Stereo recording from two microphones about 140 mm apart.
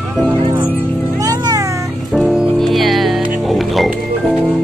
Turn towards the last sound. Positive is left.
turn(degrees=0)  # may be behind; listen again after turning